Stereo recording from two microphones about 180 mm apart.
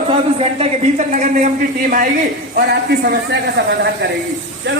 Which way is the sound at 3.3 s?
70° right (ahead or behind).